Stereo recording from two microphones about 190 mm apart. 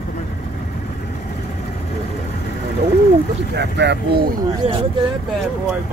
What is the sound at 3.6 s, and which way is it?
Speech, 65° right (ahead or behind).